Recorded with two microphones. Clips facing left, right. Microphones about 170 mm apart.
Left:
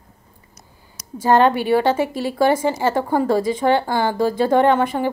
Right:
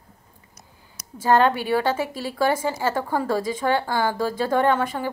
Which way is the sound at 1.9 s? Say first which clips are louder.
Left 6 dB; 50° left (ahead or behind).